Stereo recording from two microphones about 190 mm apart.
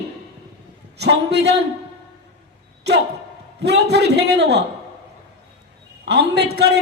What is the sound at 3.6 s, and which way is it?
A man's voice, 60° right (ahead or behind).